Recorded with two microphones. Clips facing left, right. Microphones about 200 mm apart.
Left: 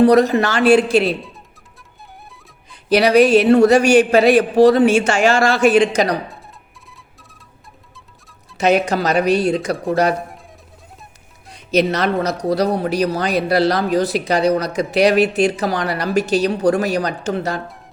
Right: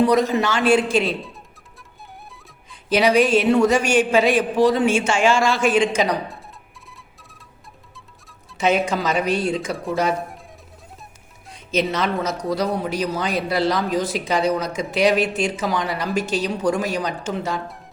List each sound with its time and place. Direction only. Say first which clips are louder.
0.0 s speech: left 5 dB; 65° left (ahead or behind)
2.9 s speech: left 5 dB; 70° left (ahead or behind)
8.5 s speech: left 4 dB; 70° left (ahead or behind)
11.5 s speech: left 5 dB; 70° left (ahead or behind)